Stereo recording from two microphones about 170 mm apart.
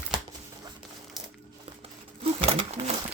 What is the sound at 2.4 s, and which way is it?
Sewing machine, 35° right (ahead or behind).